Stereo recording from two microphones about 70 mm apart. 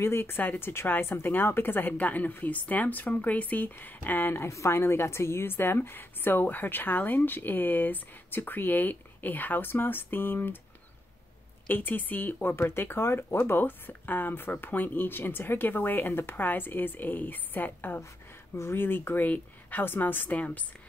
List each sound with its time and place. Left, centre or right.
0.0 s speech: left
4.5 s speech: left
11.6 s speech: left